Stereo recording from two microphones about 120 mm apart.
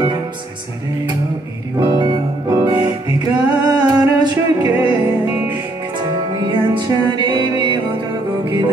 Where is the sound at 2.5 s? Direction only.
30° right (ahead or behind).